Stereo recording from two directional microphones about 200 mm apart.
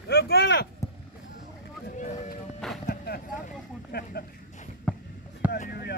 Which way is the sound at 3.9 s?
55° left (ahead or behind).